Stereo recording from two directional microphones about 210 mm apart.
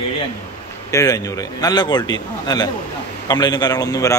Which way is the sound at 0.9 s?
15° left (ahead or behind).